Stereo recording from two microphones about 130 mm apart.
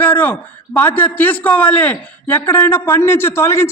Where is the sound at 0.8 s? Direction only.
15° left (ahead or behind).